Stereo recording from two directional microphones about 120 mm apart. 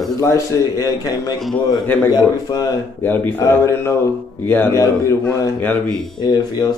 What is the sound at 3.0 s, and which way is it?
A man's voice, 25° left (ahead or behind).